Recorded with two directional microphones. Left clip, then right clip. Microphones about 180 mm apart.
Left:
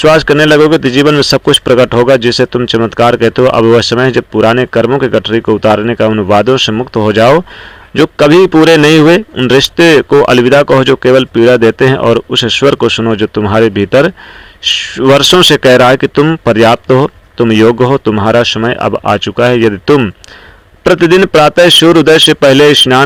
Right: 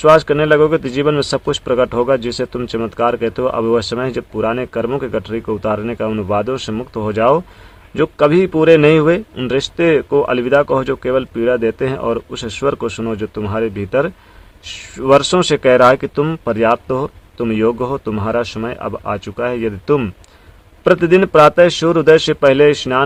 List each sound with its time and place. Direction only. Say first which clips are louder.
0.0 s speech: left 5 dB; 30° left (ahead or behind)
16.5 s speech: left 8 dB; 35° left (ahead or behind)
20.9 s speech: left 5 dB; 30° left (ahead or behind)